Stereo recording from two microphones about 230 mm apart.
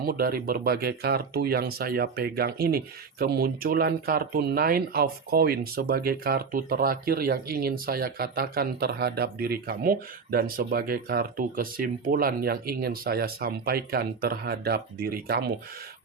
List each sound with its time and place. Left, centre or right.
0.0 s speech: right